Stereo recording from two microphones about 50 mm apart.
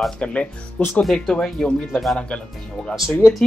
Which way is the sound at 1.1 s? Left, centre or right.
Centre.